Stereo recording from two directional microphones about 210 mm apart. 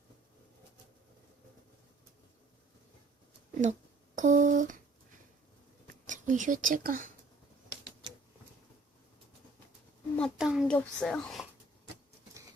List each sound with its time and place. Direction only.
3.6 s speech: 35° right (ahead or behind)
5.9 s speech: 40° right (ahead or behind)
10.2 s a child's voice: centre (ahead or behind)